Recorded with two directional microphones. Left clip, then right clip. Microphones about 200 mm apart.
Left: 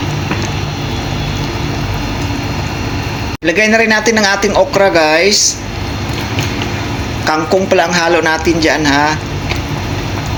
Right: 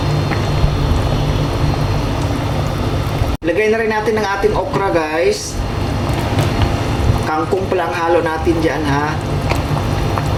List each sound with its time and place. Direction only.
3.4 s speech: 35° left (ahead or behind)
7.3 s speech: 35° left (ahead or behind)